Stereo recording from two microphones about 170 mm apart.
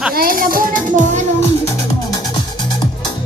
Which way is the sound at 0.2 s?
60° right (ahead or behind).